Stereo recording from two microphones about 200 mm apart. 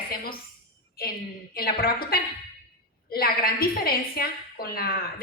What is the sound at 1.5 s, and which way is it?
A woman's voice, 50° left (ahead or behind).